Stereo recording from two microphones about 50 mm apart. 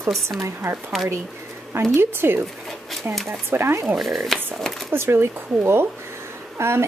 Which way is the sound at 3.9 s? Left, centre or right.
Centre.